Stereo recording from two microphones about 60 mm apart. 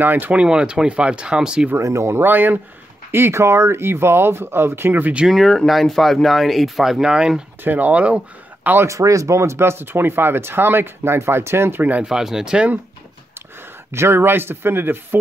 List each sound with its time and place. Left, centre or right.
0.0 s speech: right
0.4 s speech: centre
1.8 s speech: right
3.1 s speech: right
5.3 s speech: centre
7.6 s speech: right
8.8 s speech: right
12.0 s speech: centre
13.9 s speech: right